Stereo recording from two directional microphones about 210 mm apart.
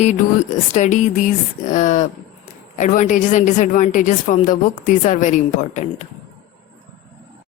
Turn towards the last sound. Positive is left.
turn(degrees=35)  # may be behind; listen again after turning